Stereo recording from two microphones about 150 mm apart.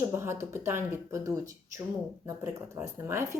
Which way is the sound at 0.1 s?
15° right (ahead or behind).